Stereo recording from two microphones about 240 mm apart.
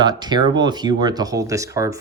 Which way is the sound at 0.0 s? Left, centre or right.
Centre.